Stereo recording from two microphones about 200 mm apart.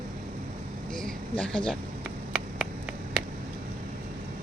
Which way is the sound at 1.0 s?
5° left (ahead or behind).